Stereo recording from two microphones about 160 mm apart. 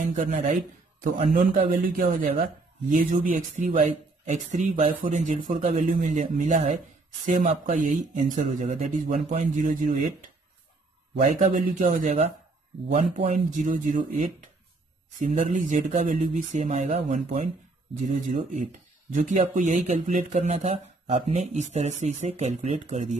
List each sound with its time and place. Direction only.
0.1 s speech: 55° right (ahead or behind)
11.1 s speech: 50° right (ahead or behind)